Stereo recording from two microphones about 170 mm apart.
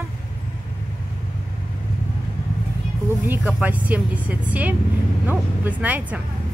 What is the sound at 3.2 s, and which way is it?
A woman's voice, 10° right (ahead or behind).